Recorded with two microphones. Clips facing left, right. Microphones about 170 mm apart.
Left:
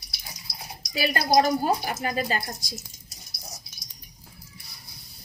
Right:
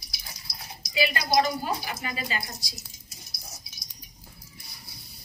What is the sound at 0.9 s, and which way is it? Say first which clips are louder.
A woman's voice: left 3 dB; 45° left (ahead or behind).